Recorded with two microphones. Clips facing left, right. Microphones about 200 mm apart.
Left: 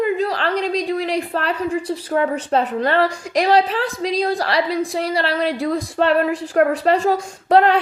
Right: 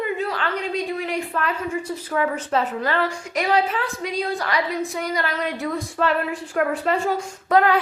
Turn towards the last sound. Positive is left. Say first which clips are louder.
# left 4 dB
turn(degrees=30)  # may be behind; listen again after turning